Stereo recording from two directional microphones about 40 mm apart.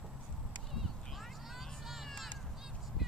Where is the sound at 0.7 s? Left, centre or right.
Centre.